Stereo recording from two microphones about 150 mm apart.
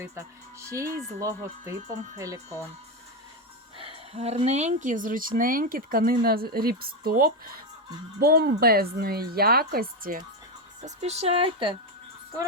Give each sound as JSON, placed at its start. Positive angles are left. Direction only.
{"t": 0.7, "sound": "speech", "side_deg": -20}
{"t": 3.8, "sound": "speech", "side_deg": -40}
{"t": 10.8, "sound": "speech", "side_deg": -45}